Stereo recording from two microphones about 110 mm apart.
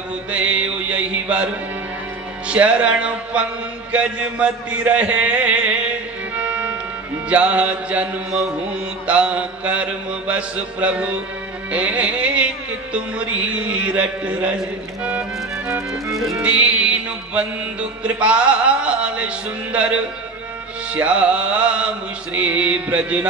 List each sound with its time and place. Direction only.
0.3 s music: 10° right (ahead or behind)